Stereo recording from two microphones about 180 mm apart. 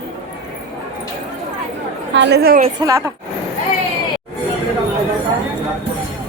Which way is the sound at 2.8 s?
20° right (ahead or behind).